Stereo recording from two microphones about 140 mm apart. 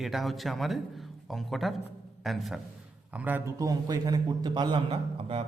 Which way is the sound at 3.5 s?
25° right (ahead or behind).